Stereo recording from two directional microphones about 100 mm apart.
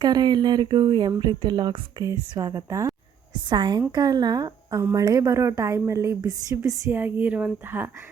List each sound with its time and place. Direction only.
0.0 s speech: 45° right (ahead or behind)
2.4 s a woman's voice: 35° right (ahead or behind)
3.3 s a woman's voice: 50° right (ahead or behind)
6.9 s speech: 20° right (ahead or behind)